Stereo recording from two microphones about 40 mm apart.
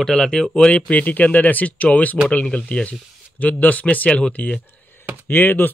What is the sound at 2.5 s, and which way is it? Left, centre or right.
Speech, left.